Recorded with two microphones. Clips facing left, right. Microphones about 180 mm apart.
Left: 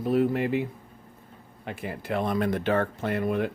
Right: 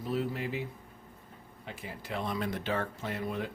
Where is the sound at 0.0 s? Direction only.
60° left (ahead or behind).